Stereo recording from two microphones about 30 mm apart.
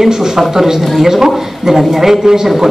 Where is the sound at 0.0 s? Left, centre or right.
Centre.